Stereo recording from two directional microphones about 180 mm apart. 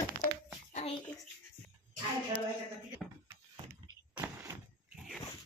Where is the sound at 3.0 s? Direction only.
5° left (ahead or behind).